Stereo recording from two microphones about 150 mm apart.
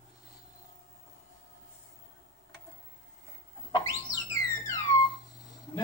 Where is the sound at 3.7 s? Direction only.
20° left (ahead or behind).